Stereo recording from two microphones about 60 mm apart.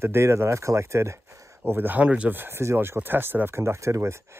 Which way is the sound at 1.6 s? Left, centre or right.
Right.